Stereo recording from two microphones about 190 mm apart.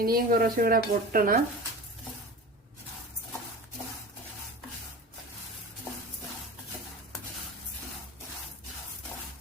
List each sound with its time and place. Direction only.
0.0 s speech: 50° right (ahead or behind)